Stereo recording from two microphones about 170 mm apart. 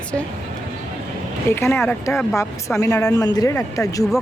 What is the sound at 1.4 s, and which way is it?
Speech, 15° left (ahead or behind).